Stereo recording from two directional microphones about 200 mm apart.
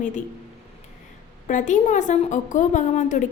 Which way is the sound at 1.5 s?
40° left (ahead or behind).